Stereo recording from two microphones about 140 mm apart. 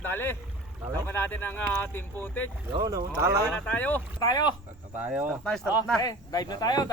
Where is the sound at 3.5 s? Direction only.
5° left (ahead or behind).